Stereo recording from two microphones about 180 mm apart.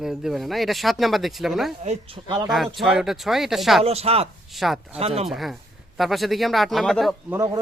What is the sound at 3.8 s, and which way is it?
Speech, 35° right (ahead or behind).